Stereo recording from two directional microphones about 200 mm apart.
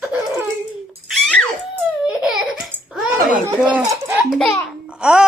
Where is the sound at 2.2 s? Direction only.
5° right (ahead or behind).